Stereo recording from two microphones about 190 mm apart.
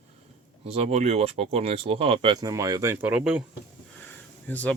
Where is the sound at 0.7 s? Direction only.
35° right (ahead or behind); by 3.4 s 5° right (ahead or behind).